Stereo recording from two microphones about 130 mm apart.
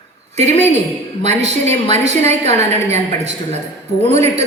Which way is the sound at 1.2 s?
60° right (ahead or behind).